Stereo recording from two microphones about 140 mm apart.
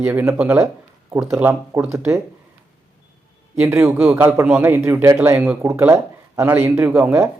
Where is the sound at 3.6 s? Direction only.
15° right (ahead or behind).